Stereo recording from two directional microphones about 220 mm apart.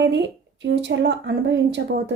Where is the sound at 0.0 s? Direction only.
55° right (ahead or behind).